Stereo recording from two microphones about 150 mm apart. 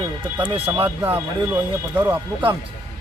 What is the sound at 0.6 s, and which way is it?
Speech, 15° right (ahead or behind).